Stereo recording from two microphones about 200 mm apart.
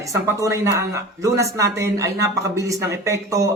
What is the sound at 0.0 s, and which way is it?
Speech, 15° right (ahead or behind).